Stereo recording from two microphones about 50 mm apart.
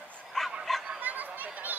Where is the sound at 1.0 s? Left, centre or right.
Right.